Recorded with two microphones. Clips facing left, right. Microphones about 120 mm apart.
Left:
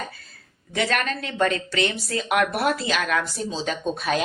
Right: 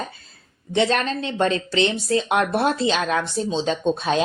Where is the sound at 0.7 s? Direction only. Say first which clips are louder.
Right 4 dB; 25° right (ahead or behind).